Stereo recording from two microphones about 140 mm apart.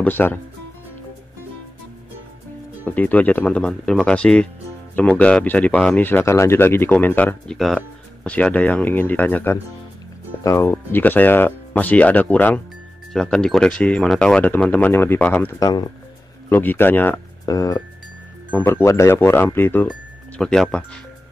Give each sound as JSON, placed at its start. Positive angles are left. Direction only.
{"t": 0.0, "sound": "speech", "side_deg": 15}
{"t": 2.8, "sound": "speech", "side_deg": 10}
{"t": 15.6, "sound": "speech", "side_deg": 35}
{"t": 16.4, "sound": "speech", "side_deg": 15}
{"t": 17.5, "sound": "speech", "side_deg": 25}
{"t": 18.5, "sound": "speech", "side_deg": 15}
{"t": 19.9, "sound": "music", "side_deg": 5}